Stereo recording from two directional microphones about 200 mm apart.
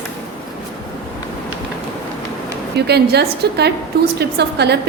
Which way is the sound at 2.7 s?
55° right (ahead or behind).